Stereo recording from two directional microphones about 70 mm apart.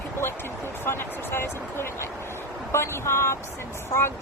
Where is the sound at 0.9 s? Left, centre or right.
Left.